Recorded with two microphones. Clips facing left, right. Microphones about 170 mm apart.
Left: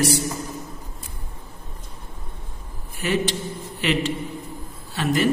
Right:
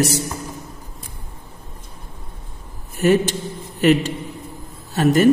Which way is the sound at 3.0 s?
45° right (ahead or behind).